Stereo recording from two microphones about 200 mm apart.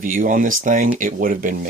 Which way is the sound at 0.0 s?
40° right (ahead or behind).